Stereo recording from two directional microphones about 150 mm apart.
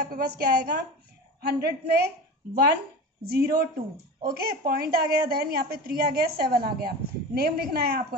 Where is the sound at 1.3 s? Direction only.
90° right.